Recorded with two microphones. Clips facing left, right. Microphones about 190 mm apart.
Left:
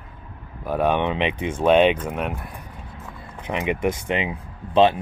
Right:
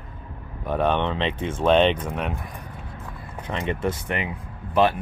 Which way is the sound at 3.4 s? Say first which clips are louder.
Left 3 dB; 15° left (ahead or behind).